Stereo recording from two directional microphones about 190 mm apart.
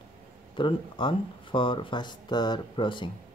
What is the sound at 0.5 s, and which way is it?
Speech, 25° left (ahead or behind).